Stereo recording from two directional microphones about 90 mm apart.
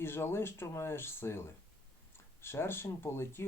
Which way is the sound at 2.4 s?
25° left (ahead or behind).